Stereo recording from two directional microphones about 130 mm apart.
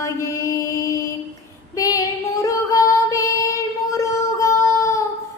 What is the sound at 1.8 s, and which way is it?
Female singing, 25° left (ahead or behind).